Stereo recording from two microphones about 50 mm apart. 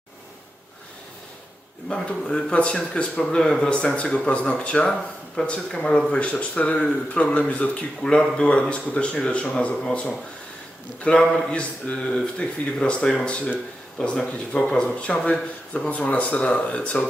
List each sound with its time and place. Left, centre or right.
2.3 s speech: left
7.5 s speech: left
8.0 s speech: centre; by 11.2 s left
11.5 s speech: centre